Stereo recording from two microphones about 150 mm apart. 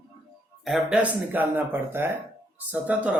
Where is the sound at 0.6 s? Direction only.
5° right (ahead or behind).